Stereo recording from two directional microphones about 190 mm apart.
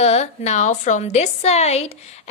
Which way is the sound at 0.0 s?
35° left (ahead or behind).